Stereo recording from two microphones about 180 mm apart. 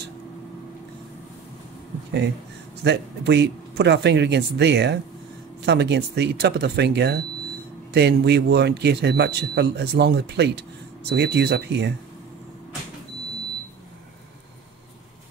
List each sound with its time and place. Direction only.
2.8 s speech: 70° right (ahead or behind)